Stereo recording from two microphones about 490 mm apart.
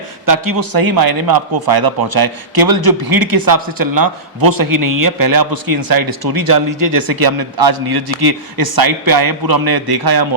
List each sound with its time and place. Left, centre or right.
0.3 s a man's voice: right